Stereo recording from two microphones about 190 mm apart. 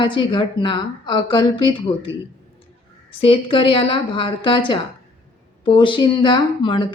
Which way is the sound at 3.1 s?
30° left (ahead or behind).